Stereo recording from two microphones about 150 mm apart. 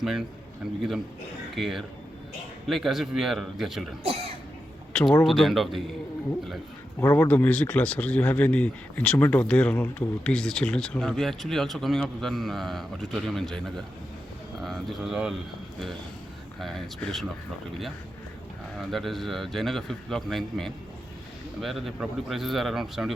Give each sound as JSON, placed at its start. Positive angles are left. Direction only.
{"t": 0.0, "sound": "a man's voice", "side_deg": 0}
{"t": 1.5, "sound": "a man's voice", "side_deg": 0}
{"t": 4.0, "sound": "cough", "side_deg": -40}
{"t": 4.9, "sound": "a man's voice", "side_deg": 5}
{"t": 7.0, "sound": "speech", "side_deg": 15}
{"t": 16.6, "sound": "a man's voice", "side_deg": 0}
{"t": 18.8, "sound": "a man's voice", "side_deg": 0}